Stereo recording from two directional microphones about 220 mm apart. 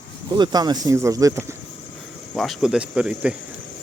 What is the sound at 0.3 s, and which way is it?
Speech, 20° right (ahead or behind).